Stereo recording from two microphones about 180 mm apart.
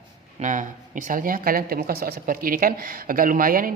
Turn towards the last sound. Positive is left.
turn(degrees=-50)  # may be behind; listen again after turning